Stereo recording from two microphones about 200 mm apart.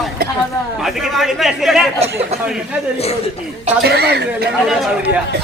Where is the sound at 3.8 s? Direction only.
55° right (ahead or behind).